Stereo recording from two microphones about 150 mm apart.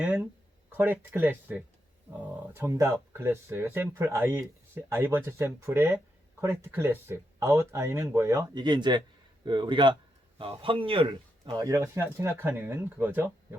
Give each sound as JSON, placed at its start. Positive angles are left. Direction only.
{"t": 0.0, "sound": "speech", "side_deg": -10}